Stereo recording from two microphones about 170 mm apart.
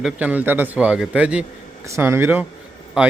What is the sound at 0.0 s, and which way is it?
A man's voice, 10° right (ahead or behind).